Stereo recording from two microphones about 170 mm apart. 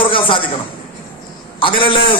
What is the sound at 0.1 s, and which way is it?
Speech, 30° left (ahead or behind).